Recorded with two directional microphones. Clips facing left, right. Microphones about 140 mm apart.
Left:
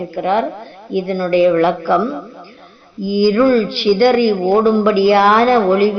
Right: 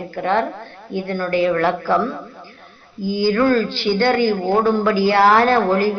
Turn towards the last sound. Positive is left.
turn(degrees=15)  # may be behind; listen again after turning